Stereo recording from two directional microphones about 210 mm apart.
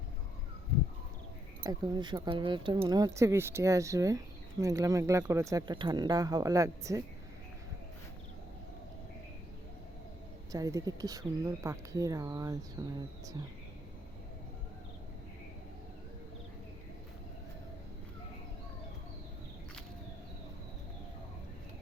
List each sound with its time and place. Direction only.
1.6 s speech: 20° right (ahead or behind)
10.5 s speech: 15° right (ahead or behind)